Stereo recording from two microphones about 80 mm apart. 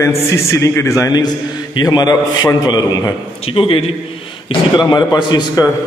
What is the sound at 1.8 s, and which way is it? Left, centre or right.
A man's voice, left.